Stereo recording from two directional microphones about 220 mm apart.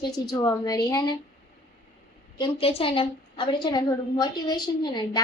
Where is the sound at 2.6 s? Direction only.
25° left (ahead or behind).